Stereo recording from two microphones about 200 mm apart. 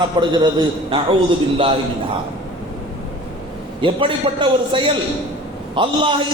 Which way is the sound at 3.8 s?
25° right (ahead or behind).